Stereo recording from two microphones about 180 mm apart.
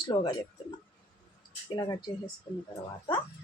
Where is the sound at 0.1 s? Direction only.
25° left (ahead or behind).